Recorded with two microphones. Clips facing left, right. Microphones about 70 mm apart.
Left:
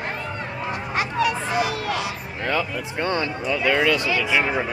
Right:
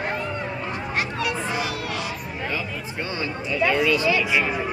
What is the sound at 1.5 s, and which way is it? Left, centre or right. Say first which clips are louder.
Music: left 4 dB; centre.